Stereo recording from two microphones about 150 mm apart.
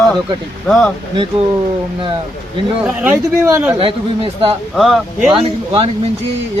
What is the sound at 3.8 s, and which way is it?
Speech, 35° right (ahead or behind).